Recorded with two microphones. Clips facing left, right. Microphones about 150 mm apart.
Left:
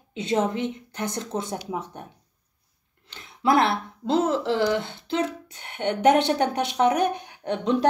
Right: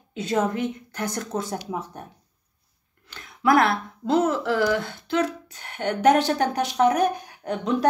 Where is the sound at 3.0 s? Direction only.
25° left (ahead or behind).